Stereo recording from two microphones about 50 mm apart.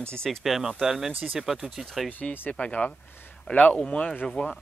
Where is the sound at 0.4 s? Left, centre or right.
Centre.